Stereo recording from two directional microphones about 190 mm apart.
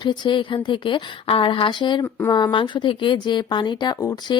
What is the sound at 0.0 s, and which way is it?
Speech, 25° left (ahead or behind).